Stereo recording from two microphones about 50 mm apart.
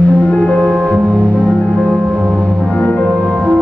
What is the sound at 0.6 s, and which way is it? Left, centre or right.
Music, right.